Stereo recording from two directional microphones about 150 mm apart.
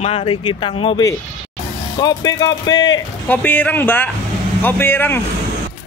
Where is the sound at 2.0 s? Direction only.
25° left (ahead or behind).